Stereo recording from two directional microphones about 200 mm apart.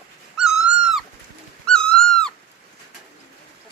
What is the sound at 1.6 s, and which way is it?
Owl, 5° left (ahead or behind).